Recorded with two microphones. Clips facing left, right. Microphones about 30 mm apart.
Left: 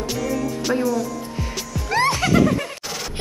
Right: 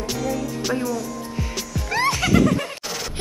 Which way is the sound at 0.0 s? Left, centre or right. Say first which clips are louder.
Left 1 dB; centre.